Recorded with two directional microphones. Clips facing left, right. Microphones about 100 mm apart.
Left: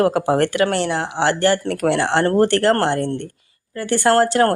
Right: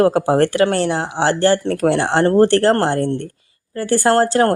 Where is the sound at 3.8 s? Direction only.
35° right (ahead or behind).